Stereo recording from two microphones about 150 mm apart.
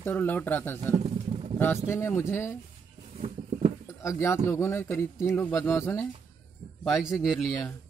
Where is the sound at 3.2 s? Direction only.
45° right (ahead or behind).